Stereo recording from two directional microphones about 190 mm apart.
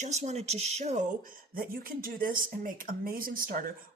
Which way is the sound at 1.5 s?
50° right (ahead or behind).